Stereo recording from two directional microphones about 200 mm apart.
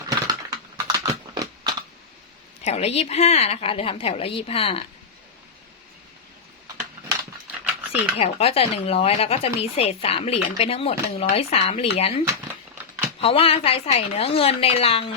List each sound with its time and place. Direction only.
0.1 s typing: 20° right (ahead or behind)
2.6 s a woman's voice: 30° left (ahead or behind)
8.2 s speech: 30° left (ahead or behind)
13.2 s speech: 30° left (ahead or behind)